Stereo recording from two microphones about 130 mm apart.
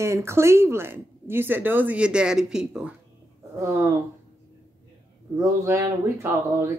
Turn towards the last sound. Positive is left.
turn(degrees=-20)  # may be behind; listen again after turning